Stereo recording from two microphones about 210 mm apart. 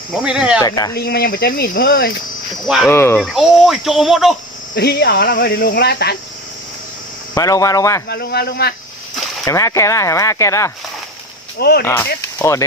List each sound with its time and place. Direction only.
0.2 s speech: 5° right (ahead or behind)
0.6 s speech: 15° left (ahead or behind)
0.9 s speech: 45° left (ahead or behind)
2.6 s speech: centre (ahead or behind)
2.9 s speech: 10° left (ahead or behind)
3.2 s speech: centre (ahead or behind)
4.7 s speech: 50° left (ahead or behind)
7.3 s speech: 15° left (ahead or behind)
8.0 s speech: 50° left (ahead or behind)
9.2 s speech: 10° left (ahead or behind)
11.6 s speech: 50° left (ahead or behind)
11.9 s speech: 10° left (ahead or behind)